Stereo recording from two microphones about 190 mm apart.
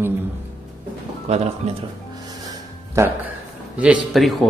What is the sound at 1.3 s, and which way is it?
Speech, 35° right (ahead or behind).